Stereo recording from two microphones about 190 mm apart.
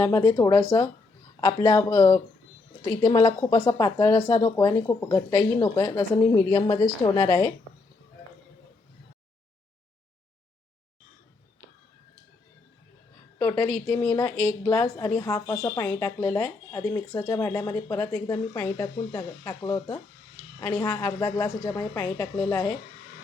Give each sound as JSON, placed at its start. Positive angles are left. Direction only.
{"t": 0.0, "sound": "a woman's voice", "side_deg": 15}
{"t": 4.5, "sound": "speech", "side_deg": 15}
{"t": 13.4, "sound": "a woman's voice", "side_deg": 15}